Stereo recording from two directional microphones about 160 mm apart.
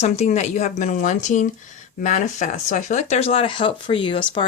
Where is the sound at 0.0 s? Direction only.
45° left (ahead or behind).